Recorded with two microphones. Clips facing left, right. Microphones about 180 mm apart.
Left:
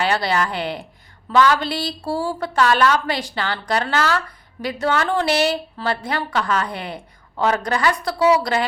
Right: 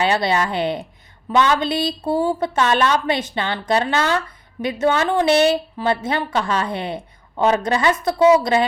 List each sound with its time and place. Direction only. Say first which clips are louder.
0.0 s a woman's voice: right 2 dB; 20° right (ahead or behind)